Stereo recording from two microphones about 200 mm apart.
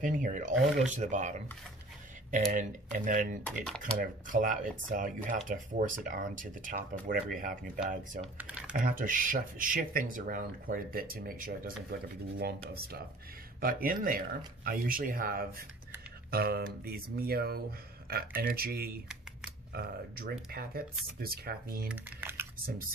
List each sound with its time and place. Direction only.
0.0 s speech: 40° right (ahead or behind)
3.1 s speech: 45° right (ahead or behind)
3.4 s speech: 5° left (ahead or behind)
4.0 s speech: 40° right (ahead or behind)
8.4 s typing: 5° right (ahead or behind)
8.7 s speech: 40° right (ahead or behind)
12.7 s speech: 50° right (ahead or behind)
21.8 s speech: 10° right (ahead or behind)
22.7 s speech: 45° right (ahead or behind)